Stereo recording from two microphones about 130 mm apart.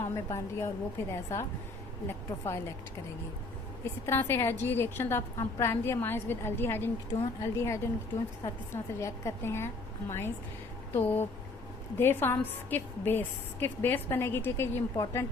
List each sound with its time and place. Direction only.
0.0 s a woman's voice: 20° left (ahead or behind)
3.8 s a woman's voice: 20° left (ahead or behind)